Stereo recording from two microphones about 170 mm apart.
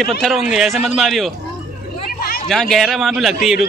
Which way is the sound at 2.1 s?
60° left (ahead or behind).